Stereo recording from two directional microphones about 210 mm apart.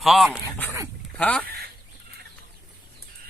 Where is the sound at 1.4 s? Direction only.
50° right (ahead or behind).